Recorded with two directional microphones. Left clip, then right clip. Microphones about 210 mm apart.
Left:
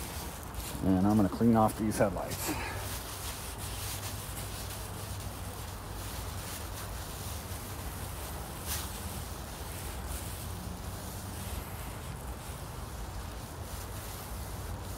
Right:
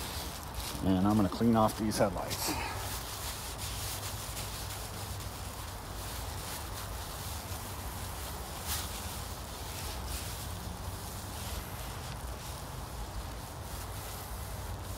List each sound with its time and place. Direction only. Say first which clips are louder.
0.8 s speech: left 1 dB; 30° right (ahead or behind)
1.1 s speech: left 2 dB; 15° right (ahead or behind)